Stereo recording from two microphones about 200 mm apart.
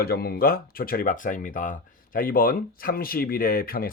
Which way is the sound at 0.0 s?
50° left (ahead or behind).